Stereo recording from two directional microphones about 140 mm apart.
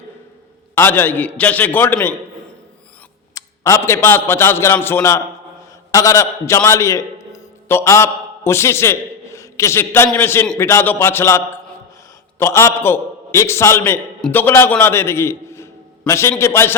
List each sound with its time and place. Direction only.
0.8 s a man's voice: 15° left (ahead or behind)
3.3 s a man's voice: 20° left (ahead or behind)